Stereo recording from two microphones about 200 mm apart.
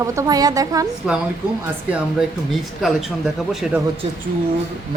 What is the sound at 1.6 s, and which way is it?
Speech, 5° right (ahead or behind).